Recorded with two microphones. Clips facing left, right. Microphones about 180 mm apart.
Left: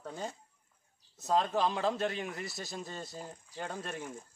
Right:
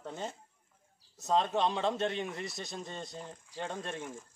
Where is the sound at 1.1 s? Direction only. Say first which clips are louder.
Even; centre (ahead or behind).